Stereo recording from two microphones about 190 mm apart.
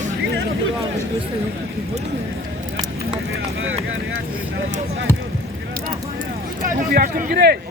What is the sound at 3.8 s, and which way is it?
Speech, 90° right.